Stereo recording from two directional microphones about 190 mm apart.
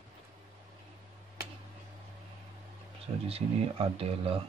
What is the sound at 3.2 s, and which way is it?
Speech, 30° right (ahead or behind).